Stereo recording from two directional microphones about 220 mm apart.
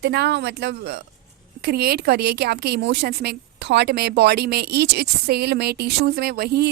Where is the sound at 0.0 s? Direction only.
50° right (ahead or behind).